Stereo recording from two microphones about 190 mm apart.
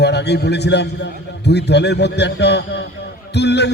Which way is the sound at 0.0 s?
60° left (ahead or behind).